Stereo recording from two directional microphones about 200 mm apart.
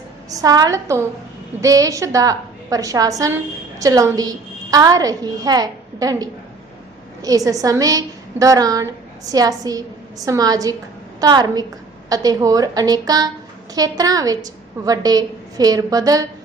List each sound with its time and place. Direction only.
0.3 s a woman's voice: 15° right (ahead or behind)